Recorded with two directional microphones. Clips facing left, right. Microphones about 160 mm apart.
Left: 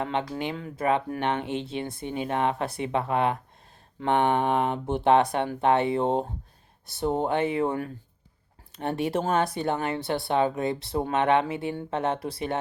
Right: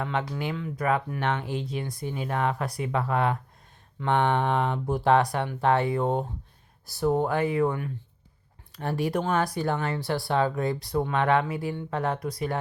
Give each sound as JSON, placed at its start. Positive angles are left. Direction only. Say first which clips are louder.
{"t": 0.0, "sound": "speech", "louder": "left 1 dB", "side_deg": 25}